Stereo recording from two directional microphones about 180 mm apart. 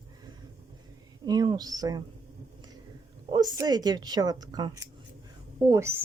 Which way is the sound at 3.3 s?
25° right (ahead or behind).